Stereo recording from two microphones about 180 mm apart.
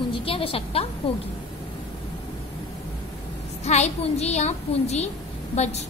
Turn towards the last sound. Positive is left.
turn(degrees=35)  # may be behind; listen again after turning